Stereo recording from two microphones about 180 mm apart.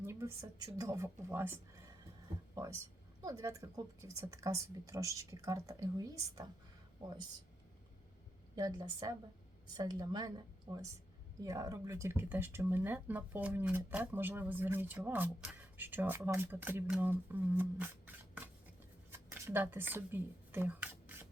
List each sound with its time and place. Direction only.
0.0 s speech: 15° right (ahead or behind)
3.2 s speech: 20° right (ahead or behind)
8.5 s speech: 25° right (ahead or behind)